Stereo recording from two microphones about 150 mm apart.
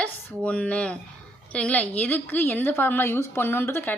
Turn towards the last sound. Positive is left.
turn(degrees=15)  # may be behind; listen again after turning